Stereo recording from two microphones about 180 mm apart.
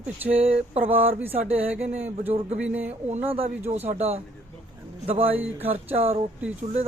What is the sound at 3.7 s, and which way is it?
Speech, 35° right (ahead or behind).